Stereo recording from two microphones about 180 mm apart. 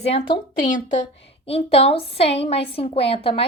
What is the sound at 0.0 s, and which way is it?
A woman's voice, 35° left (ahead or behind).